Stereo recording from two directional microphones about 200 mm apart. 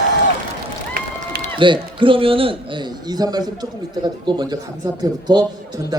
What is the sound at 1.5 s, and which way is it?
A man's voice, 25° right (ahead or behind).